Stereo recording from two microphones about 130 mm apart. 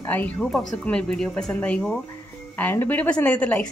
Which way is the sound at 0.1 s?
10° left (ahead or behind).